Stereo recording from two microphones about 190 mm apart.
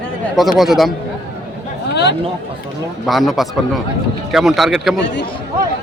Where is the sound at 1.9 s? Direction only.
65° left (ahead or behind).